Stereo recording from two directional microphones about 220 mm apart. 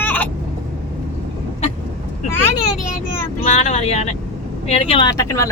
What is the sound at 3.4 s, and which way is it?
Speech, 30° left (ahead or behind).